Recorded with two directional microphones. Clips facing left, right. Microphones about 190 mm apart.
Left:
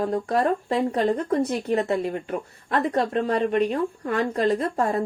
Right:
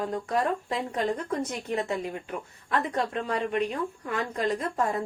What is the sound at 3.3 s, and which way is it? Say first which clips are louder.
Speech: left 6 dB; 55° left (ahead or behind).